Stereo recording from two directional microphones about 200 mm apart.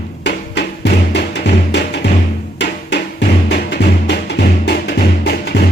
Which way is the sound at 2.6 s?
60° left (ahead or behind).